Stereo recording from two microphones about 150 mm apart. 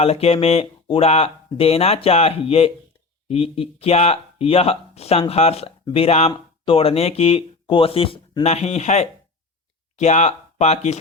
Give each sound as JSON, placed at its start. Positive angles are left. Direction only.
{"t": 0.0, "sound": "speech", "side_deg": 40}
{"t": 8.4, "sound": "speech", "side_deg": 45}